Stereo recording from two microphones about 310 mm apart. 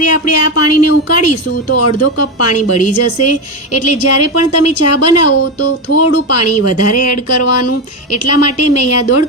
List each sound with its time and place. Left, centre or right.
0.0 s a woman's voice: left